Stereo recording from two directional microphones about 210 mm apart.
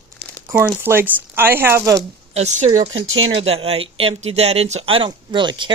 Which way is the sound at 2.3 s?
30° right (ahead or behind).